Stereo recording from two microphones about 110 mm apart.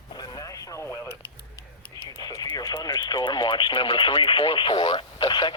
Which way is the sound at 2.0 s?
35° left (ahead or behind).